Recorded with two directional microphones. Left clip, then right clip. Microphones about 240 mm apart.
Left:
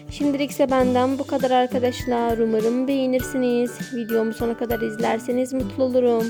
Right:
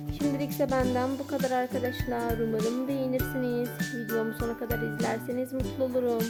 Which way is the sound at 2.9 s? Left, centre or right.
Left.